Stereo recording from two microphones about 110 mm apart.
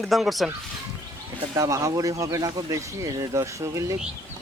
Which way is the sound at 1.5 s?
30° right (ahead or behind).